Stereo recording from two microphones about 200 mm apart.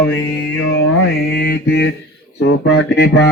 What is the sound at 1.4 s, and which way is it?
Mantra, 55° left (ahead or behind).